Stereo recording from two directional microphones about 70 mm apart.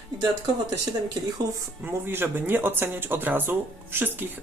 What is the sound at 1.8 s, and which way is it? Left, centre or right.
A woman's voice, right.